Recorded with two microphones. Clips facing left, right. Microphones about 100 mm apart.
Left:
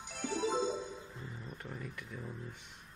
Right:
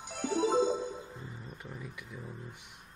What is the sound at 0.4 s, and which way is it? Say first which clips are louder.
Music: right 6 dB; 20° right (ahead or behind).